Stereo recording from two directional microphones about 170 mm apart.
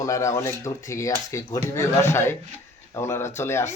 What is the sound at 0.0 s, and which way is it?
Speech, 20° left (ahead or behind).